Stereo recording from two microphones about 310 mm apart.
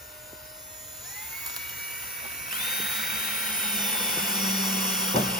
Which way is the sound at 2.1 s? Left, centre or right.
Left.